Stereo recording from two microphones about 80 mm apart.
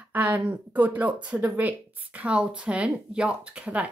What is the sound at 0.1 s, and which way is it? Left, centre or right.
Speech, right.